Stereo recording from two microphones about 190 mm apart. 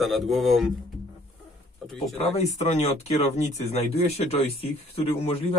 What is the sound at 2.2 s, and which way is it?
Speech, 35° left (ahead or behind).